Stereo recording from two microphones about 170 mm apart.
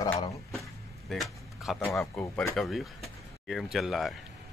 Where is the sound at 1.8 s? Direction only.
5° left (ahead or behind).